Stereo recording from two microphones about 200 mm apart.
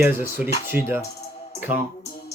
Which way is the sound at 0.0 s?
10° right (ahead or behind).